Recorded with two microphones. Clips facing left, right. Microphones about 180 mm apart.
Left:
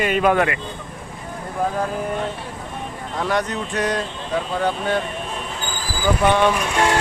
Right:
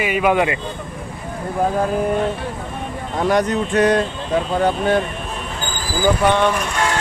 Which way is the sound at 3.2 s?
40° right (ahead or behind).